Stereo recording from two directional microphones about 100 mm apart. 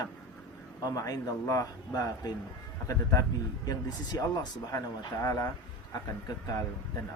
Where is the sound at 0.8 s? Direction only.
40° left (ahead or behind).